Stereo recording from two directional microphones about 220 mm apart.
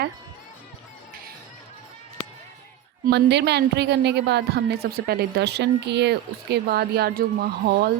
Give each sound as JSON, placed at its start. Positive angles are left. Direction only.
{"t": 3.1, "sound": "a woman's voice", "side_deg": -50}